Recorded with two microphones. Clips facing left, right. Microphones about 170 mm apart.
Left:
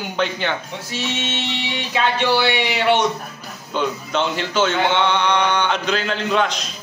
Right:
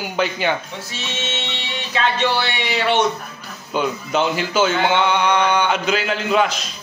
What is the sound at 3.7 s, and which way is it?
Speech, 10° right (ahead or behind).